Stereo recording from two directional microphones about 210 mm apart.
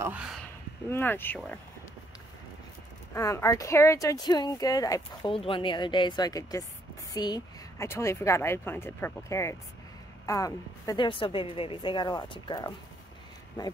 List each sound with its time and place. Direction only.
0.0 s speech: 5° right (ahead or behind)
0.8 s speech: 10° left (ahead or behind)
3.2 s a woman's voice: 15° left (ahead or behind)